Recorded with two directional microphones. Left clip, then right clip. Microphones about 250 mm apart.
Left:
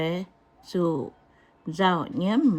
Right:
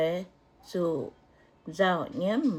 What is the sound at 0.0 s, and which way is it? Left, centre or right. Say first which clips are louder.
Speech: right 1 dB; left.